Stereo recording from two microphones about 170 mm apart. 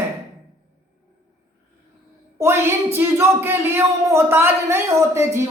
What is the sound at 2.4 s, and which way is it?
Speech, 15° right (ahead or behind).